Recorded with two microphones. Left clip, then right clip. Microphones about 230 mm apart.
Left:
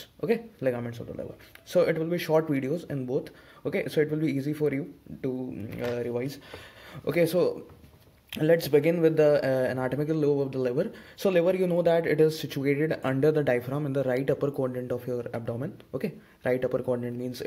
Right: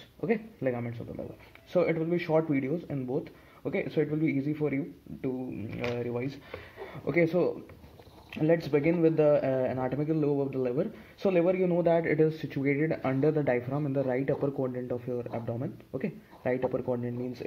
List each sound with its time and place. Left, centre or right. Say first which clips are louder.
0.2 s speech: left 3 dB; left
1.7 s speech: left 3 dB; left